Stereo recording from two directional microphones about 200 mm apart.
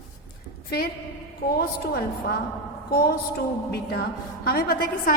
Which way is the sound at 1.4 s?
50° left (ahead or behind).